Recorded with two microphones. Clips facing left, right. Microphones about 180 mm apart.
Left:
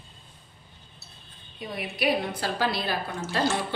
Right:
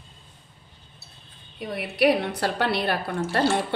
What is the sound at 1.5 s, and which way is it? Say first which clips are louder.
A woman's voice: right 7 dB; 65° right (ahead or behind).